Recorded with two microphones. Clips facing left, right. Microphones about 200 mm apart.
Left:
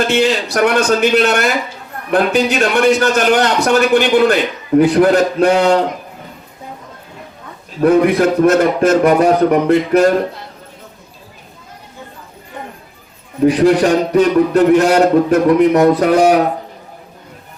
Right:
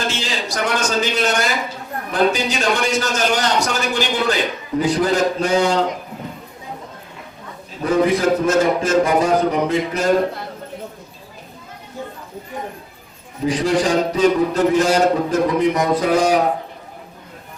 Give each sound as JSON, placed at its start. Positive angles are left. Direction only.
{"t": 0.1, "sound": "a man's voice", "side_deg": 60}
{"t": 7.8, "sound": "a man's voice", "side_deg": 60}
{"t": 13.4, "sound": "a man's voice", "side_deg": 60}